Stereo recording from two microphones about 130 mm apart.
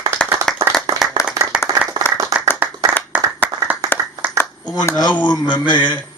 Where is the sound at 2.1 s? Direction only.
25° right (ahead or behind).